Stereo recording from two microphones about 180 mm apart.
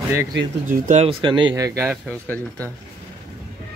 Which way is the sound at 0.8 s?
40° right (ahead or behind).